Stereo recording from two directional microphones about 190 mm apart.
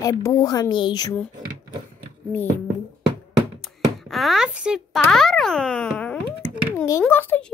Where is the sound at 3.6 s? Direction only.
Centre (ahead or behind).